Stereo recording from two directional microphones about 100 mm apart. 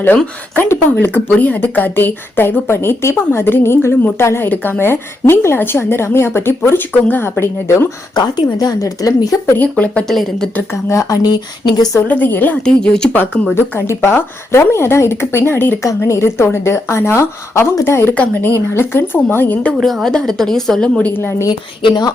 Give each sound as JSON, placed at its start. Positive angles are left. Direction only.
{"t": 0.5, "sound": "a woman's voice", "side_deg": 20}
{"t": 8.1, "sound": "speech", "side_deg": 45}
{"t": 8.5, "sound": "speech", "side_deg": 35}
{"t": 9.6, "sound": "speech", "side_deg": 15}
{"t": 10.8, "sound": "a woman's voice", "side_deg": 30}
{"t": 11.2, "sound": "speech", "side_deg": 45}
{"t": 11.9, "sound": "a woman's voice", "side_deg": 20}
{"t": 12.6, "sound": "speech", "side_deg": 10}
{"t": 13.6, "sound": "a woman's voice", "side_deg": 25}
{"t": 18.1, "sound": "a woman's voice", "side_deg": 15}
{"t": 19.8, "sound": "a woman's voice", "side_deg": 0}
{"t": 21.2, "sound": "a woman's voice", "side_deg": 25}
{"t": 21.8, "sound": "speech", "side_deg": 45}